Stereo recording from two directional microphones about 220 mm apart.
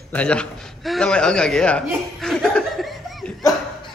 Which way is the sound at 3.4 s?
20° left (ahead or behind).